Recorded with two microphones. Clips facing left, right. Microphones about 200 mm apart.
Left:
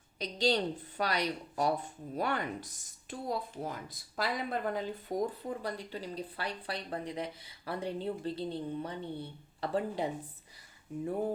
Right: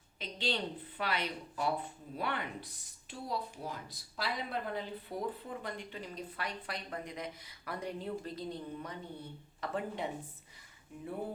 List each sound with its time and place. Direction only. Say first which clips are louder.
0.2 s a woman's voice: left 6 dB; 40° left (ahead or behind)